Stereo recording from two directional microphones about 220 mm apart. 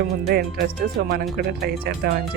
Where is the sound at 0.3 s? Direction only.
45° right (ahead or behind).